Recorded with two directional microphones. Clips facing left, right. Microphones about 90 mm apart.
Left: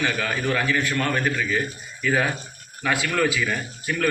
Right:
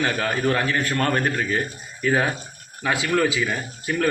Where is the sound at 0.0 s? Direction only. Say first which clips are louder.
Right 2 dB; 35° right (ahead or behind).